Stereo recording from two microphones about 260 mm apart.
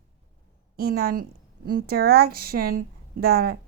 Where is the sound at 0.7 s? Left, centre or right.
Right.